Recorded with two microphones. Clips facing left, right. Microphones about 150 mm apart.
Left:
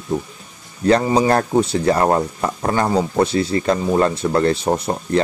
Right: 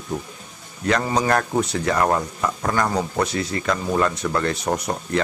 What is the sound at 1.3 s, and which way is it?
Speech, 30° left (ahead or behind).